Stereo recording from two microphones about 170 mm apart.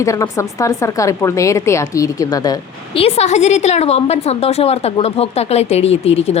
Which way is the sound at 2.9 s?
35° left (ahead or behind).